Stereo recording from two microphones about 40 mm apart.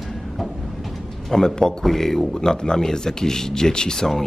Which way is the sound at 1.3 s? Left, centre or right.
Centre.